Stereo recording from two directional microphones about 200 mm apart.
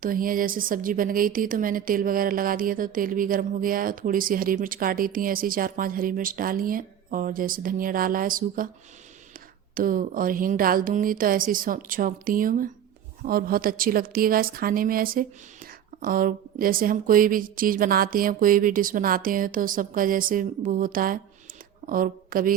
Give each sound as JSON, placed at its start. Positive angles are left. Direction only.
{"t": 0.0, "sound": "speech", "side_deg": -45}
{"t": 9.7, "sound": "a woman's voice", "side_deg": -45}